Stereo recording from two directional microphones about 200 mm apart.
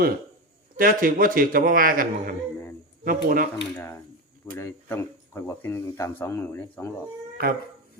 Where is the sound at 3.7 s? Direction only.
10° left (ahead or behind).